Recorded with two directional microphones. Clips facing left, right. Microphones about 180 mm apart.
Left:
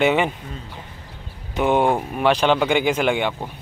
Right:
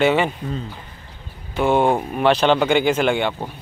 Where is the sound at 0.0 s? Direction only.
15° left (ahead or behind).